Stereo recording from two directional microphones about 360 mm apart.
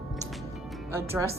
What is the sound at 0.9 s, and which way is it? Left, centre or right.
Speech, centre.